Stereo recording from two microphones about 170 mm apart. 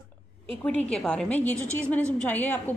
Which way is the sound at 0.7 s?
5° left (ahead or behind).